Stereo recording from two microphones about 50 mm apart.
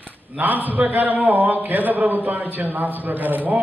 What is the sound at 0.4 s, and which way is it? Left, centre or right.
A man's voice, right.